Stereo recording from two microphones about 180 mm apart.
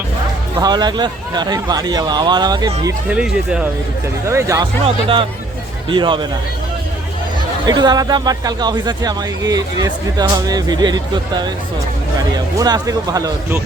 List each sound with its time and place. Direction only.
0.6 s speech: 25° right (ahead or behind)
3.1 s speech: 5° right (ahead or behind)
4.3 s speech: 15° right (ahead or behind)
4.8 s speech: 30° right (ahead or behind)
7.6 s speech: 20° right (ahead or behind)
12.5 s speech: 20° right (ahead or behind)